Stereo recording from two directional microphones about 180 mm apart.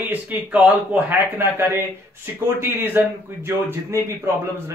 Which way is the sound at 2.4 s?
10° right (ahead or behind).